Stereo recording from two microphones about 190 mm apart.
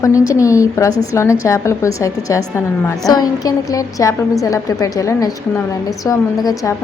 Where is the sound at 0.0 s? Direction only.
15° left (ahead or behind).